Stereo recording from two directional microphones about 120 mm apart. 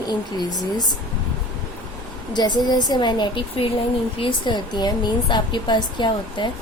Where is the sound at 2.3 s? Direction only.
35° left (ahead or behind).